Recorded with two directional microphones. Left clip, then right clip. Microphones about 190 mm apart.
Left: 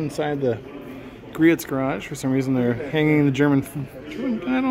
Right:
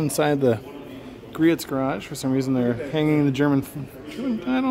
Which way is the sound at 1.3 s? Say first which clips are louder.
Left 2 dB; centre (ahead or behind).